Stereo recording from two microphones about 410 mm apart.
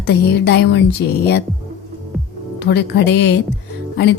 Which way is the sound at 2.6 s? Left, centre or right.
Left.